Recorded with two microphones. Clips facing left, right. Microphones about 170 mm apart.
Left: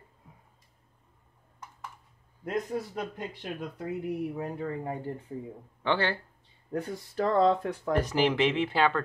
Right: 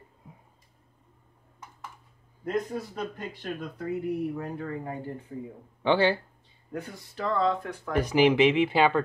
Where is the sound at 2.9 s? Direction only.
15° left (ahead or behind).